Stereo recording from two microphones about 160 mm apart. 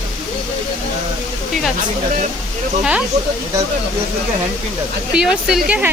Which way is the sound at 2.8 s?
5° right (ahead or behind).